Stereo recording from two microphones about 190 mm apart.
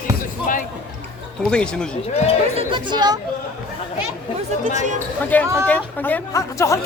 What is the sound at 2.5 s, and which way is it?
Speech, 25° right (ahead or behind).